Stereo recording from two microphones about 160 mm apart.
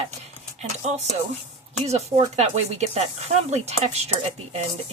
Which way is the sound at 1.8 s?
45° right (ahead or behind).